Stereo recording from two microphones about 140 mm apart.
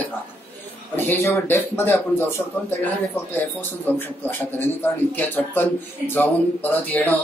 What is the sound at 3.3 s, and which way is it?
Speech, 15° left (ahead or behind).